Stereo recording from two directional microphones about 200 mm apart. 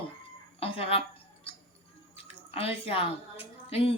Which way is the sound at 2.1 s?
30° left (ahead or behind).